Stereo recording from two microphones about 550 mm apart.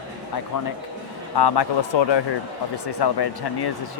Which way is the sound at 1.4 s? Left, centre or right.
Left.